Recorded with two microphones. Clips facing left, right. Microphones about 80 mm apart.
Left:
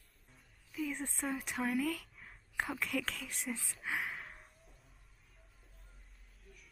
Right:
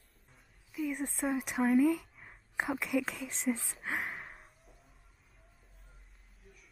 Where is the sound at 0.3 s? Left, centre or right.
Centre.